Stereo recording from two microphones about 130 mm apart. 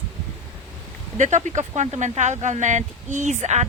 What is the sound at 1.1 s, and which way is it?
Speech, 65° right (ahead or behind).